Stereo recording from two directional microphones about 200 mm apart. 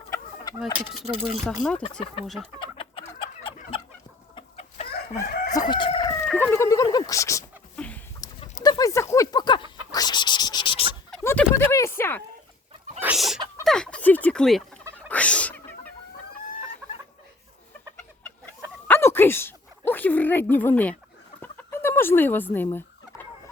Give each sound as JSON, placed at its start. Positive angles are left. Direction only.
{"t": 0.6, "sound": "speech", "side_deg": 0}
{"t": 2.6, "sound": "chicken", "side_deg": 25}
{"t": 5.2, "sound": "chicken", "side_deg": 45}
{"t": 5.5, "sound": "crowing", "side_deg": 20}
{"t": 6.2, "sound": "a sound", "side_deg": 10}
{"t": 8.2, "sound": "chicken", "side_deg": 20}
{"t": 8.6, "sound": "a sound", "side_deg": 20}
{"t": 11.1, "sound": "a sound", "side_deg": 10}
{"t": 13.0, "sound": "chicken", "side_deg": -5}
{"t": 13.7, "sound": "turkey", "side_deg": 5}
{"t": 15.1, "sound": "sneeze", "side_deg": 5}
{"t": 18.9, "sound": "a sound", "side_deg": 10}
{"t": 21.4, "sound": "fowl", "side_deg": 10}